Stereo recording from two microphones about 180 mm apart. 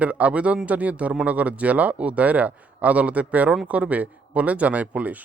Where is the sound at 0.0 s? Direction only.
10° right (ahead or behind).